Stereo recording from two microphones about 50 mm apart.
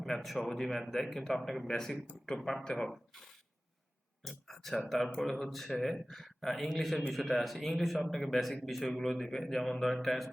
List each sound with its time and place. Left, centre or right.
0.0 s a man's voice: centre
4.2 s a man's voice: centre